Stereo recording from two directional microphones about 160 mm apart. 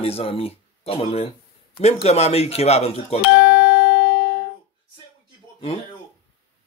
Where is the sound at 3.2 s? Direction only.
65° left (ahead or behind).